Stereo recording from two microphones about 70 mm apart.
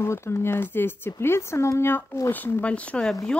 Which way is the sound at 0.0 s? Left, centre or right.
Left.